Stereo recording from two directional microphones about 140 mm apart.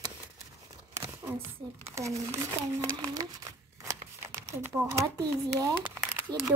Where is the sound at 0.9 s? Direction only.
20° right (ahead or behind).